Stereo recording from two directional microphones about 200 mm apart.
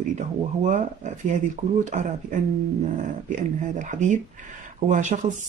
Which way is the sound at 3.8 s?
40° right (ahead or behind).